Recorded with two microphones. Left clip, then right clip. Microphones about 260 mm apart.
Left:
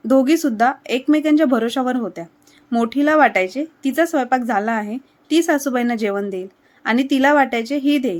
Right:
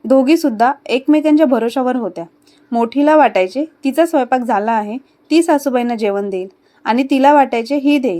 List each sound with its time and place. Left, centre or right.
0.1 s speech: centre